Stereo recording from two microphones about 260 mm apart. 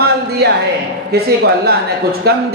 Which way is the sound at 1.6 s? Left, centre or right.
Right.